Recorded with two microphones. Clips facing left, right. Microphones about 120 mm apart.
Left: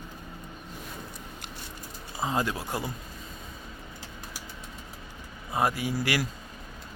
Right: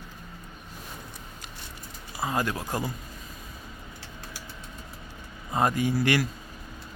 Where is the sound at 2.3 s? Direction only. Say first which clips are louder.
Right 1 dB; 15° left (ahead or behind).